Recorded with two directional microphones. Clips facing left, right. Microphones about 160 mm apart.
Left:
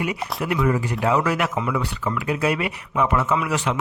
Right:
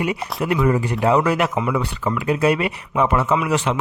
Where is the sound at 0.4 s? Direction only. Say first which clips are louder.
Right 3 dB; 30° right (ahead or behind).